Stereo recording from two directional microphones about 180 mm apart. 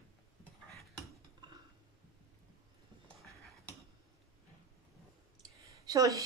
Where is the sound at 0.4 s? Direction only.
Centre (ahead or behind).